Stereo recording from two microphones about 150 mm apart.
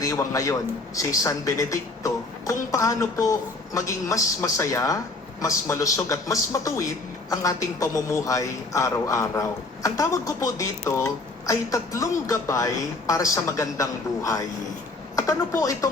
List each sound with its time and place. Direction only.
0.0 s a man's voice: 20° left (ahead or behind)